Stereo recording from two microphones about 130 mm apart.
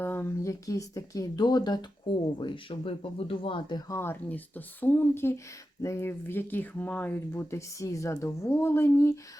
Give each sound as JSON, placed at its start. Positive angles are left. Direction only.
{"t": 0.0, "sound": "speech", "side_deg": 15}
{"t": 3.9, "sound": "speech", "side_deg": 15}